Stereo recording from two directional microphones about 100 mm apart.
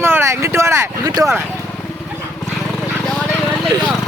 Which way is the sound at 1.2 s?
40° right (ahead or behind).